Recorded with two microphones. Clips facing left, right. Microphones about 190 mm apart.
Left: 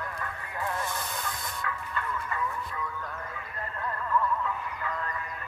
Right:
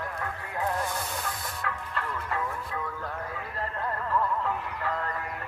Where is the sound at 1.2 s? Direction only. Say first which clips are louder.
Right 1 dB; 65° right (ahead or behind).